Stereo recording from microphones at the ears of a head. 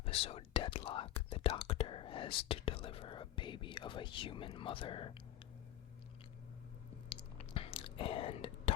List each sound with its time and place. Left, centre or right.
0.0 s speech: left
6.9 s chewing: left